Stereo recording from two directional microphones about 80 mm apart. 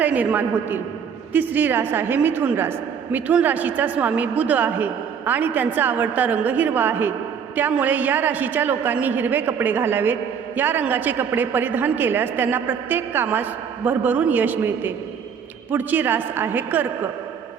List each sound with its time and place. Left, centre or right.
0.0 s a woman's voice: centre